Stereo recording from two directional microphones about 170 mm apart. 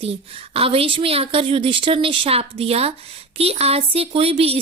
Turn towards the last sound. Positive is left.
turn(degrees=-35)  # may be behind; listen again after turning